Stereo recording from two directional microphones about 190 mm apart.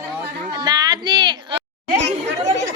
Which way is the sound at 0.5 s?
20° right (ahead or behind).